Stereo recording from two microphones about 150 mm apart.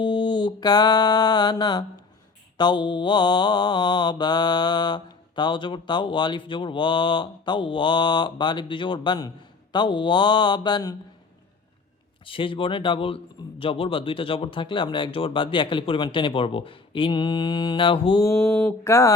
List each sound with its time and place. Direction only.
0.0 s a sound: 30° left (ahead or behind)
2.6 s mantra: 30° left (ahead or behind)
9.7 s speech: 30° left (ahead or behind)
12.2 s mantra: 35° left (ahead or behind)
18.2 s speech: 20° left (ahead or behind)